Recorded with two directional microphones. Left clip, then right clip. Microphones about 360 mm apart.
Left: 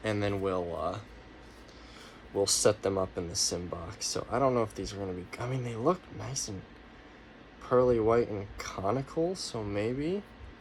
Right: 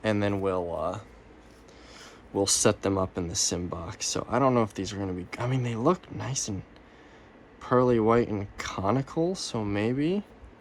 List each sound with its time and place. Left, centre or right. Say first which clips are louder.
0.0 s speech: right 4 dB; centre
2.5 s speech: right 2 dB; right
7.6 s speech: right 2 dB; right